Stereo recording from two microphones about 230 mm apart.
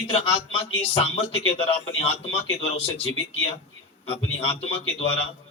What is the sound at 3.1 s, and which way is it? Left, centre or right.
A man's voice, left.